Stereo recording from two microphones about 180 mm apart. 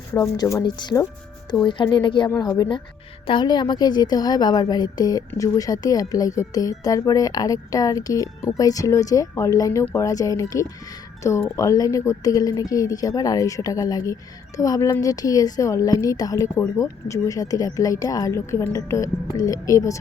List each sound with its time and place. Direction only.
0.1 s speech: 15° left (ahead or behind)